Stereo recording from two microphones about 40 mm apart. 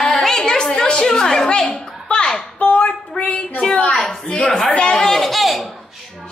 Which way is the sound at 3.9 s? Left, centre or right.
Centre.